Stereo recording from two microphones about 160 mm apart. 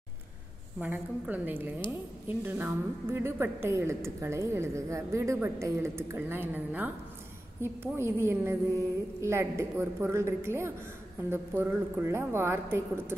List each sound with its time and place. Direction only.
0.7 s a woman's voice: 10° right (ahead or behind)